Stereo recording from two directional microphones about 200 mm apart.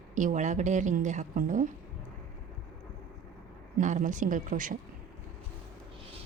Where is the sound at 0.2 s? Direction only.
40° right (ahead or behind).